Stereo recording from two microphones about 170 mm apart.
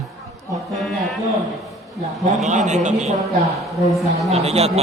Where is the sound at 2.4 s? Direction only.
45° right (ahead or behind).